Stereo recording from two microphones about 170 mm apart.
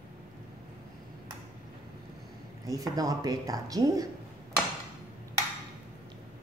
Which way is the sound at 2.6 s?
20° right (ahead or behind).